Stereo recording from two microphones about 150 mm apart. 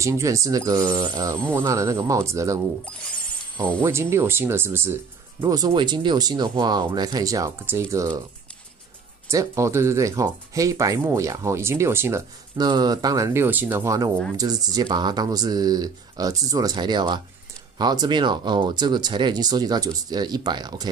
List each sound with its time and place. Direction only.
0.0 s speech: 20° right (ahead or behind)
3.8 s speech: 15° right (ahead or behind)
9.3 s speech: 20° right (ahead or behind)
12.5 s speech: 25° right (ahead or behind)